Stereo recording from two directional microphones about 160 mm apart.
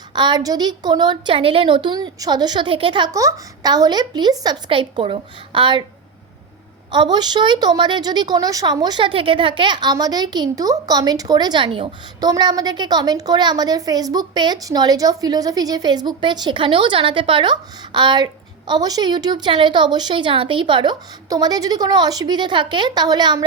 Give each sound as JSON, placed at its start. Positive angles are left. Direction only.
{"t": 0.1, "sound": "a woman's voice", "side_deg": -30}
{"t": 6.9, "sound": "a woman's voice", "side_deg": -25}